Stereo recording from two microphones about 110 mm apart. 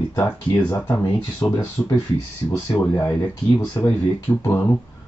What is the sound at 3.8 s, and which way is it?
Speech, 25° left (ahead or behind).